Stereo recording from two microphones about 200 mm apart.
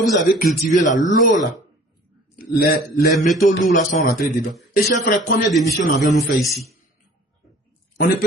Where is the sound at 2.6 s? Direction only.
50° left (ahead or behind).